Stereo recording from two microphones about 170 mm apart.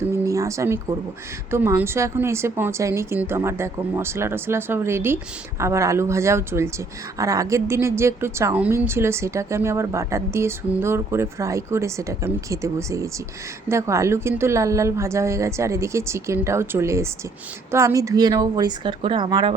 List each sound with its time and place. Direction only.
0.0 s a woman's voice: 20° right (ahead or behind)